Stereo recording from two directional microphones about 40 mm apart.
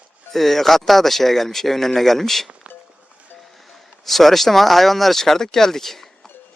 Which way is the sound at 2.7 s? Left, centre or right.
Right.